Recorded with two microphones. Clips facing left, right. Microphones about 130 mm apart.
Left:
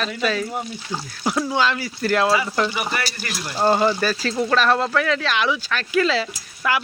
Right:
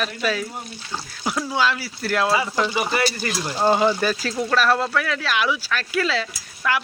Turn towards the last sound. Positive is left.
turn(degrees=5)  # may be behind; listen again after turning